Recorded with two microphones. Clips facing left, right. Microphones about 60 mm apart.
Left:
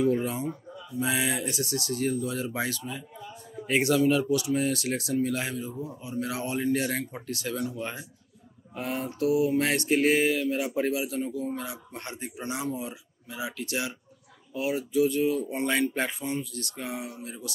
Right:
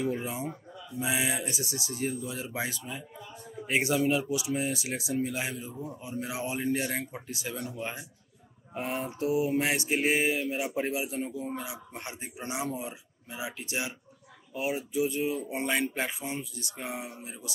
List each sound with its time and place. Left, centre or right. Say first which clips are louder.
0.0 s speech: left 6 dB; centre
8.7 s speech: left 1 dB; right
9.6 s speech: left 4 dB; centre
11.6 s speech: left 2 dB; centre